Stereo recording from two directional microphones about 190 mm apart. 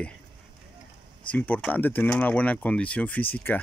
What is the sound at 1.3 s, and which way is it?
Speech, 5° left (ahead or behind).